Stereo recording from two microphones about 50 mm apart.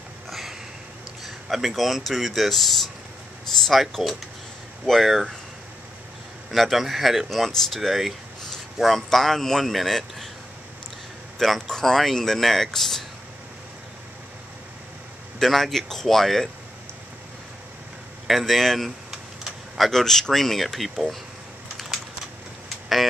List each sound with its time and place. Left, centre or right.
0.3 s a sound: centre
1.2 s speech: centre
6.5 s speech: centre
11.3 s speech: centre
15.3 s speech: centre
18.2 s speech: centre
18.9 s computer keyboard: centre
19.9 s speech: centre
21.7 s a sound: centre